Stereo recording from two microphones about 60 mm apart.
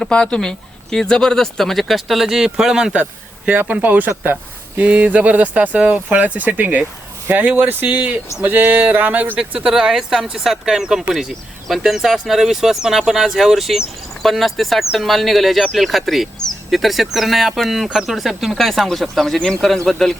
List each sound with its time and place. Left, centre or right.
0.0 s speech: centre
3.0 s speech: right
9.4 s speech: centre